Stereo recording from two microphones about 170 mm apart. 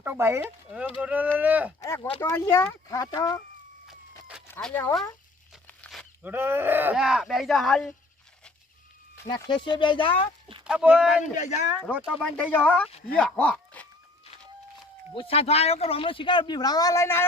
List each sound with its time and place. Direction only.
0.0 s speech: 10° right (ahead or behind)
2.2 s speech: 20° left (ahead or behind)
3.8 s a sound: 5° right (ahead or behind)
4.4 s speech: 10° left (ahead or behind)
5.6 s a sound: 5° left (ahead or behind)
6.2 s speech: 10° right (ahead or behind)
9.2 s speech: 25° left (ahead or behind)
10.6 s speech: 5° right (ahead or behind)
11.3 s speech: 45° left (ahead or behind)
11.9 s speech: 5° right (ahead or behind)
12.4 s speech: 10° left (ahead or behind)
15.1 s speech: 35° left (ahead or behind); by 17.2 s 15° left (ahead or behind)